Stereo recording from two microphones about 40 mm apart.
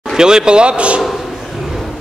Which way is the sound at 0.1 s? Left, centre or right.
Centre.